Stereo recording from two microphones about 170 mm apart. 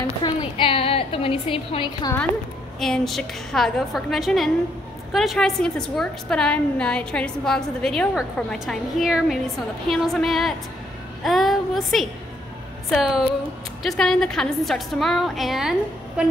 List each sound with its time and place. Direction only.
0.2 s a woman's voice: 30° left (ahead or behind)
2.8 s a woman's voice: centre (ahead or behind)